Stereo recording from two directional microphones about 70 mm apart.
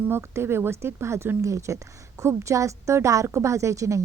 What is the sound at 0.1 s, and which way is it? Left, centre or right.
A woman's voice, right.